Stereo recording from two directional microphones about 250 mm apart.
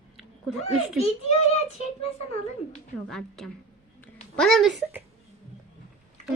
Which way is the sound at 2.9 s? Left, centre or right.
Centre.